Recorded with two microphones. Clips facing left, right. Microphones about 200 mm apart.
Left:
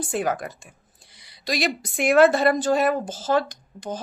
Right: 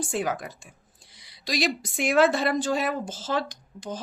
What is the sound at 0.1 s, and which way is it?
A woman's voice, 55° left (ahead or behind).